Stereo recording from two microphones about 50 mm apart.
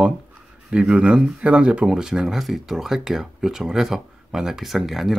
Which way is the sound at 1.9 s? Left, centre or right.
Centre.